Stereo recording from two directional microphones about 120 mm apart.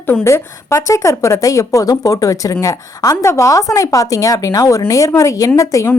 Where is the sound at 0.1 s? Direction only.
20° left (ahead or behind).